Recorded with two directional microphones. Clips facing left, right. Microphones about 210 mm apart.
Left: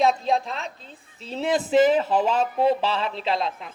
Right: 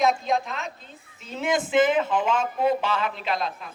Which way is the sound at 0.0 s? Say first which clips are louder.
Left 2 dB; 30° left (ahead or behind).